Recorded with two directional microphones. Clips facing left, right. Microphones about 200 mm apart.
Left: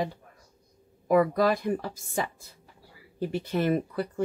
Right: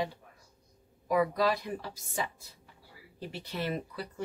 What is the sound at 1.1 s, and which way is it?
Speech, 50° left (ahead or behind).